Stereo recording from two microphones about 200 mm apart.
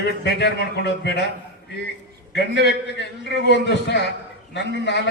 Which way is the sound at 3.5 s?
55° left (ahead or behind).